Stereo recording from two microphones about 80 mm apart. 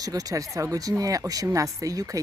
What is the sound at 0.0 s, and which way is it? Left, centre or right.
Speech, right.